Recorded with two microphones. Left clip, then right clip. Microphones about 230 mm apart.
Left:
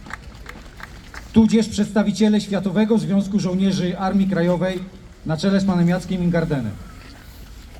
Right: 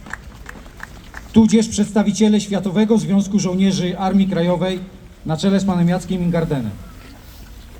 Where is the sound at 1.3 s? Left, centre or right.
Right.